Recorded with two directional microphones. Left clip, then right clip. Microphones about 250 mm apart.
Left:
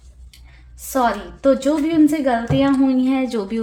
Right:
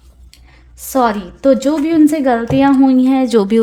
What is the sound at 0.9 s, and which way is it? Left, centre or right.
A woman's voice, right.